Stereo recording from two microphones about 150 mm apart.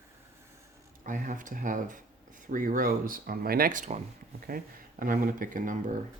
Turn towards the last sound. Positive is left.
turn(degrees=-65)  # may be behind; listen again after turning